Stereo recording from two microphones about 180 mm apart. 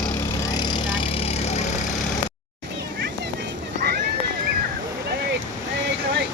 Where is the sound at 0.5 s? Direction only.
30° left (ahead or behind).